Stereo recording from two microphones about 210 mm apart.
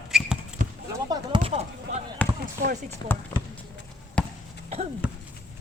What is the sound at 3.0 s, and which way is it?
Speech, 20° left (ahead or behind).